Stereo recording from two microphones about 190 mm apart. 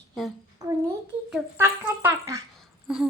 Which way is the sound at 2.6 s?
Centre (ahead or behind).